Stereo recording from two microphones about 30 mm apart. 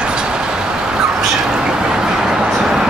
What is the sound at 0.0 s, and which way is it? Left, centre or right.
Vehicle, right.